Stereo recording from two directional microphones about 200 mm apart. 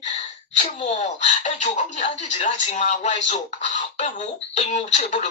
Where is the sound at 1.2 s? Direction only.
35° left (ahead or behind).